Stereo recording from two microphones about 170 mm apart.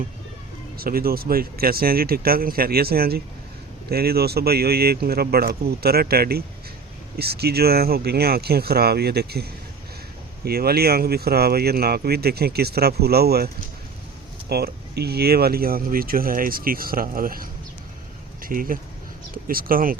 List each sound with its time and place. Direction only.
0.8 s speech: 60° right (ahead or behind)
14.5 s speech: 70° right (ahead or behind)